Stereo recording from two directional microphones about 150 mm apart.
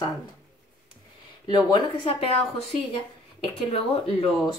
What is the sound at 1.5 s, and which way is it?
A woman's voice, 35° left (ahead or behind).